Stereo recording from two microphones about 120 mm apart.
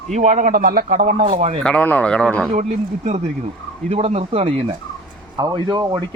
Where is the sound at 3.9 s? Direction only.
60° right (ahead or behind).